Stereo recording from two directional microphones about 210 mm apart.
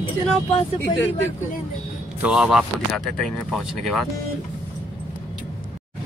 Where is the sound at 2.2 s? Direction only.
5° right (ahead or behind).